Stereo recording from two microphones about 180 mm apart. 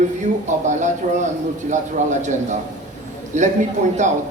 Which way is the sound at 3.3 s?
40° right (ahead or behind).